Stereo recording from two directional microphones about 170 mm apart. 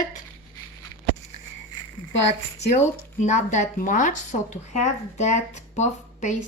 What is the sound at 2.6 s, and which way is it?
Speech, 40° left (ahead or behind).